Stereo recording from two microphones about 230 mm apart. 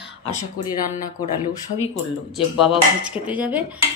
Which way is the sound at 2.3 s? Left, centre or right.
Centre.